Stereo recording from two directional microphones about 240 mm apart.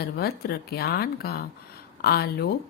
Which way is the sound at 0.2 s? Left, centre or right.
Left.